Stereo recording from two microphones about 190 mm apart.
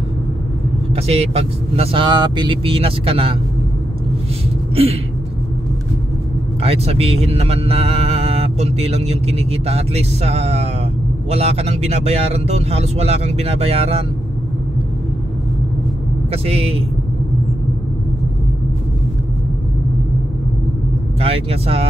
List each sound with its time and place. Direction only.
0.9 s speech: 30° right (ahead or behind)
6.6 s speech: 30° right (ahead or behind)
16.3 s speech: 30° right (ahead or behind)
21.2 s speech: 30° right (ahead or behind)